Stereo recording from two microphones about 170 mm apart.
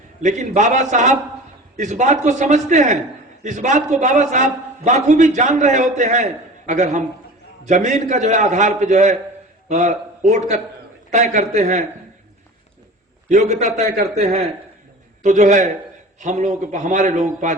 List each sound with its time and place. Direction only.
0.2 s a man's voice: 45° right (ahead or behind)
13.2 s a man's voice: 45° right (ahead or behind)